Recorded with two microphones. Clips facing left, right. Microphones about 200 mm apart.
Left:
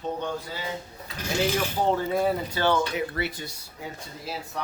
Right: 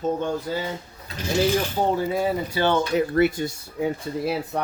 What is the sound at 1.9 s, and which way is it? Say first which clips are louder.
Speech: left 1 dB; 5° right (ahead or behind).